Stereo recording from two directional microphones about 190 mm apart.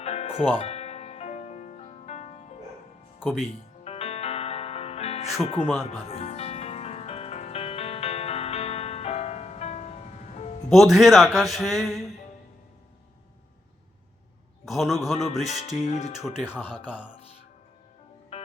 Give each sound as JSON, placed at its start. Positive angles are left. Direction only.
{"t": 0.0, "sound": "music", "side_deg": 35}
{"t": 3.8, "sound": "music", "side_deg": 35}
{"t": 5.6, "sound": "speech", "side_deg": -5}
{"t": 6.1, "sound": "music", "side_deg": 30}
{"t": 10.7, "sound": "speech", "side_deg": 0}
{"t": 14.6, "sound": "speech", "side_deg": 0}
{"t": 15.4, "sound": "speech", "side_deg": 35}
{"t": 16.2, "sound": "speech", "side_deg": -5}
{"t": 18.3, "sound": "music", "side_deg": 35}